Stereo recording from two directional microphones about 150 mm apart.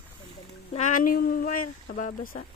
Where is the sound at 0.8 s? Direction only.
60° left (ahead or behind).